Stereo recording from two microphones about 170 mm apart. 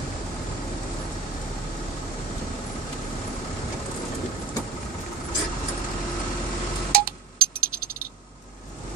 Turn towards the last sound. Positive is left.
turn(degrees=-60)  # may be behind; listen again after turning